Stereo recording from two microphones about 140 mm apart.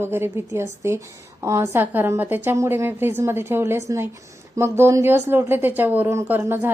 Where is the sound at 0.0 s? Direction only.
15° right (ahead or behind).